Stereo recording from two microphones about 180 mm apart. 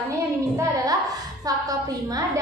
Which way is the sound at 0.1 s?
20° right (ahead or behind).